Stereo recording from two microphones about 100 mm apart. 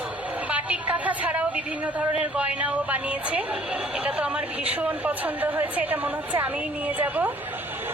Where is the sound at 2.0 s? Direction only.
15° right (ahead or behind).